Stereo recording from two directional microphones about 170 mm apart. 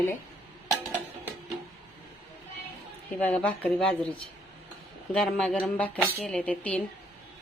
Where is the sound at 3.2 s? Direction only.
10° left (ahead or behind).